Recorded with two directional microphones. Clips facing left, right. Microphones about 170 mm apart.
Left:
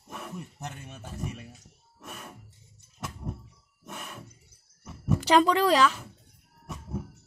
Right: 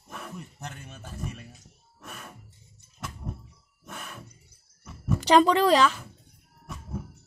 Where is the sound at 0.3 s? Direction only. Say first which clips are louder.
Left 1 dB; 20° left (ahead or behind).